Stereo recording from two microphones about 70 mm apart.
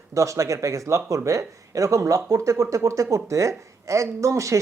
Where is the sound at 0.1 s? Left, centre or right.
Right.